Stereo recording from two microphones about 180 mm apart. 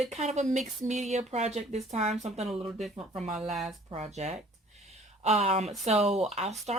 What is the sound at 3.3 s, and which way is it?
Speech, centre (ahead or behind).